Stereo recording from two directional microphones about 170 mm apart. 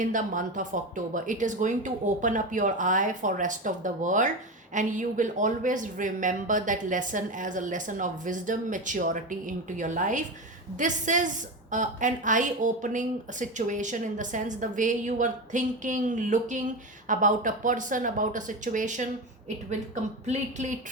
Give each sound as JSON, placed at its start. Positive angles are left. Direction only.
{"t": 0.0, "sound": "speech", "side_deg": -50}
{"t": 20.2, "sound": "speech", "side_deg": -45}